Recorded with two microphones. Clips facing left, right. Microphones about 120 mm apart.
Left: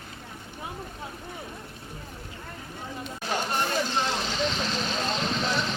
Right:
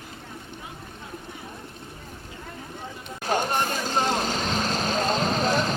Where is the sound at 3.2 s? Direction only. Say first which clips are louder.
Right 4 dB; 45° right (ahead or behind).